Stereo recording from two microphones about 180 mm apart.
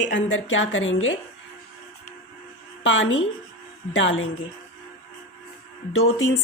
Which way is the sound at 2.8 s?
90° left.